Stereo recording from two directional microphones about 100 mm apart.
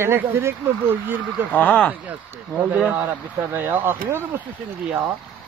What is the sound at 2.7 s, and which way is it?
Speech, 15° right (ahead or behind).